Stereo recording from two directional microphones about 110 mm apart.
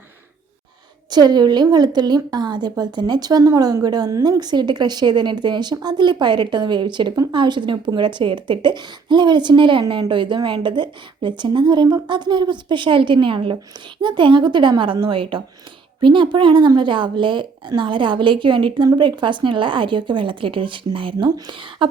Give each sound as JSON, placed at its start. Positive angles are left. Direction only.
{"t": 1.1, "sound": "a woman's voice", "side_deg": -40}
{"t": 21.2, "sound": "a woman's voice", "side_deg": -35}
{"t": 21.8, "sound": "a sound", "side_deg": -50}